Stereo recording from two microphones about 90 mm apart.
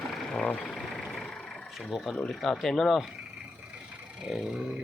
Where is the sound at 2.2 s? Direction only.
5° left (ahead or behind).